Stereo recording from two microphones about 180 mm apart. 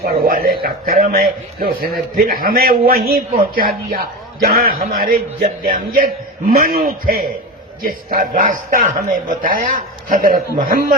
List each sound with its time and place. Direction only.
0.0 s a man's voice: 55° right (ahead or behind)